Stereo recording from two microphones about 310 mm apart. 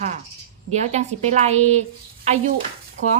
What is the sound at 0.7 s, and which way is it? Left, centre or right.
A woman's voice, right.